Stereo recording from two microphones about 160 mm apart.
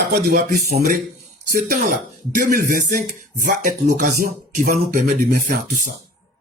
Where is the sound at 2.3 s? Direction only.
55° right (ahead or behind).